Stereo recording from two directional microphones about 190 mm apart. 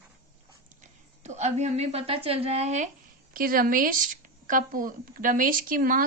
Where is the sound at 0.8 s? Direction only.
35° right (ahead or behind).